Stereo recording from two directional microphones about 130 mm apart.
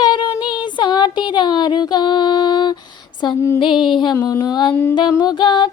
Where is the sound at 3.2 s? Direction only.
35° left (ahead or behind).